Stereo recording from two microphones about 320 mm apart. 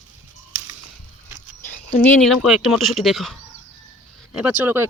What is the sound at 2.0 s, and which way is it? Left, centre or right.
Speech, centre.